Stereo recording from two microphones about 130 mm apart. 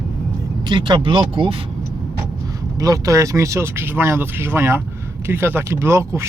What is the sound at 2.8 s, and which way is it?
Speech, 25° right (ahead or behind).